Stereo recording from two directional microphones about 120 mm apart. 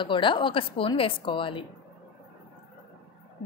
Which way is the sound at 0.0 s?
45° left (ahead or behind).